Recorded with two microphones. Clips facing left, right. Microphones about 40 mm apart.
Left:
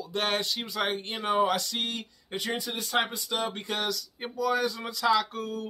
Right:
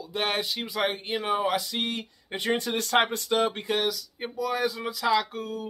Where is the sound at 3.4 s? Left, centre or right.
Right.